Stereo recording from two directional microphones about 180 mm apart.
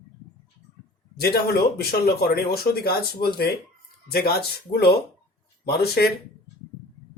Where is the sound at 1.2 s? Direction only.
60° left (ahead or behind).